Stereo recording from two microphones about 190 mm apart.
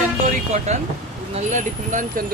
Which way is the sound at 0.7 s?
35° right (ahead or behind).